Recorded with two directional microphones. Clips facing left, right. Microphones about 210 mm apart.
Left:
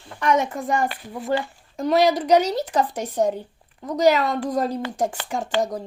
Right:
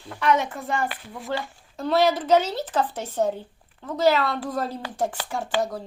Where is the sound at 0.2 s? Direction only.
45° left (ahead or behind).